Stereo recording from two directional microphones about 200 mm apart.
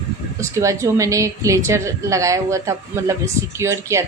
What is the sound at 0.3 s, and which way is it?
A woman's voice, 15° right (ahead or behind).